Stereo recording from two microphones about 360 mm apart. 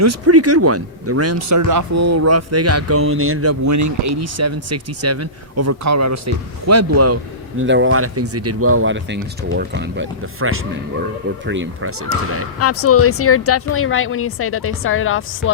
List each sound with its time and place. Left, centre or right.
0.0 s speech: right
7.6 s speech: right
12.5 s speech: left